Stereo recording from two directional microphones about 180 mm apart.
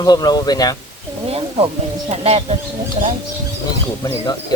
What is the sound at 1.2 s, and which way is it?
Snake, 30° right (ahead or behind).